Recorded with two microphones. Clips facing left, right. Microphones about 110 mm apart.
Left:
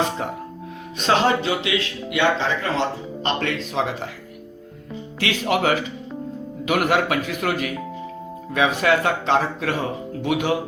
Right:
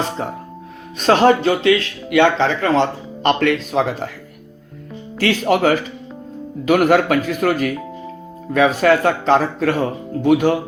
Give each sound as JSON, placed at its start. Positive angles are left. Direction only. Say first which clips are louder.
{"t": 0.9, "sound": "speech", "louder": "right 6 dB", "side_deg": -45}
{"t": 3.2, "sound": "speech", "louder": "right 8 dB", "side_deg": -55}
{"t": 5.2, "sound": "speech", "louder": "right 5 dB", "side_deg": -40}